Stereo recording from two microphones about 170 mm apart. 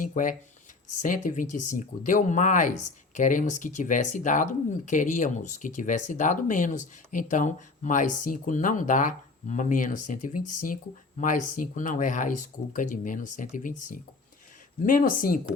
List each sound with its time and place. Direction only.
0.0 s speech: 50° left (ahead or behind)